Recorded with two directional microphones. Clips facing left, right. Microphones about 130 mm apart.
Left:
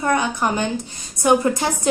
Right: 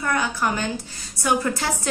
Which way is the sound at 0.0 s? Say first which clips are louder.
Left 4 dB; 20° left (ahead or behind).